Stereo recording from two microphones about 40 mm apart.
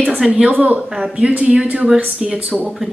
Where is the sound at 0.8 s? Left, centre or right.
Right.